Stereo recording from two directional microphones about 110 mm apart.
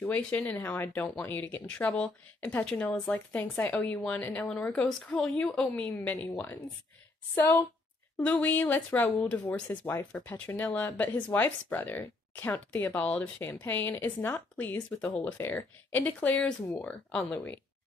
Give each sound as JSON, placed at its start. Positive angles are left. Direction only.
{"t": 0.0, "sound": "speech", "side_deg": 15}
{"t": 8.2, "sound": "speech", "side_deg": 15}